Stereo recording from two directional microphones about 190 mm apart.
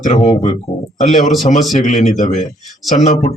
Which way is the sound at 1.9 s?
40° left (ahead or behind).